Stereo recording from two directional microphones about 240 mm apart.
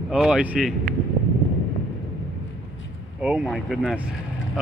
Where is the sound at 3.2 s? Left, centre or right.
Centre.